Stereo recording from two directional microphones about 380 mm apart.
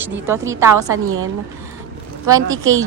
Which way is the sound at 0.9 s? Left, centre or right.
Right.